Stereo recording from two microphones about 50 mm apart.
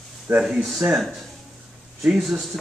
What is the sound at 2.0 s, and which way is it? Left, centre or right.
Speech, centre.